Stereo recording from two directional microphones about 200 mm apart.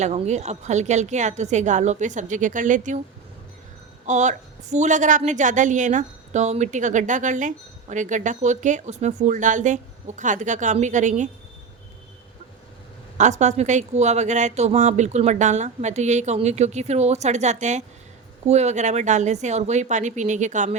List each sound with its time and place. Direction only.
0.0 s a woman's voice: 35° right (ahead or behind)
4.0 s a woman's voice: 35° right (ahead or behind)
13.1 s a woman's voice: 35° right (ahead or behind)